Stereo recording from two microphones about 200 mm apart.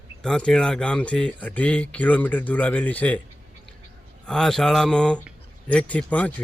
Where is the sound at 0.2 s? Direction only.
5° left (ahead or behind).